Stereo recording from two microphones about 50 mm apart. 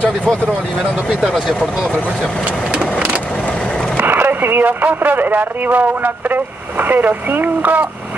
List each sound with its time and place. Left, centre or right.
3.9 s speech: right